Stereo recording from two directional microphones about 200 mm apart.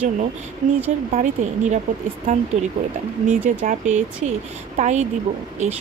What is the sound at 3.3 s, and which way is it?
Speech, 40° right (ahead or behind).